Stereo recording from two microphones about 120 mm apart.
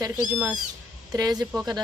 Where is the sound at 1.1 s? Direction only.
30° right (ahead or behind).